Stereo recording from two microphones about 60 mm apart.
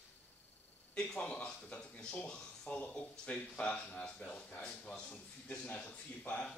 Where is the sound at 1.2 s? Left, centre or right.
Centre.